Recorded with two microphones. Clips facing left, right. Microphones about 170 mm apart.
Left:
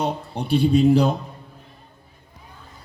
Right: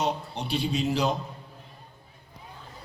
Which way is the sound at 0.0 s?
55° left (ahead or behind).